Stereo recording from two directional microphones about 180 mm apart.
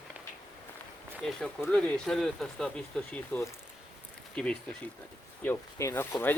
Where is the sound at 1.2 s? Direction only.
5° left (ahead or behind).